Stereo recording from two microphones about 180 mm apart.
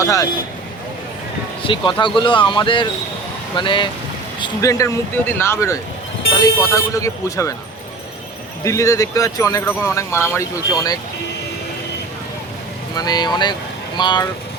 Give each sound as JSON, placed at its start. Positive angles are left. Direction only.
{"t": 0.0, "sound": "speech", "side_deg": 20}
{"t": 1.6, "sound": "speech", "side_deg": 25}
{"t": 8.6, "sound": "speech", "side_deg": 15}
{"t": 13.0, "sound": "speech", "side_deg": 20}